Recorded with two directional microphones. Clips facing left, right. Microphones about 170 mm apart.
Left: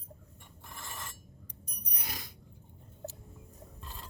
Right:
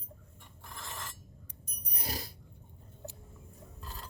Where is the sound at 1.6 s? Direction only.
40° right (ahead or behind).